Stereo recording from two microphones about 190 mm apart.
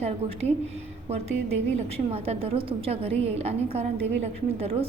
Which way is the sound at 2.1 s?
30° right (ahead or behind).